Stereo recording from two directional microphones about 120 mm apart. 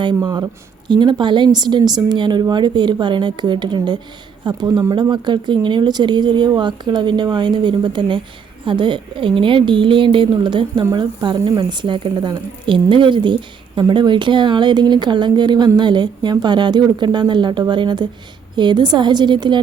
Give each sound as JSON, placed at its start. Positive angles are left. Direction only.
{"t": 0.0, "sound": "a woman's voice", "side_deg": -35}